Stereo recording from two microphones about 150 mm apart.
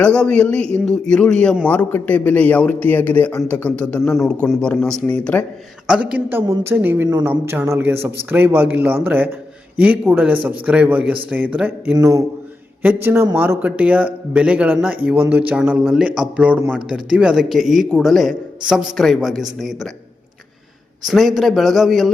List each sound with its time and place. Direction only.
0.0 s a man's voice: 5° left (ahead or behind)
5.9 s a man's voice: 5° right (ahead or behind)
11.9 s a man's voice: 20° right (ahead or behind); by 19.9 s centre (ahead or behind)
21.1 s a man's voice: centre (ahead or behind)